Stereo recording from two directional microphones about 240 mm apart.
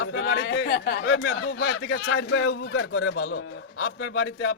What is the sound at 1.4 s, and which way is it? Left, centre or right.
A man's voice, left.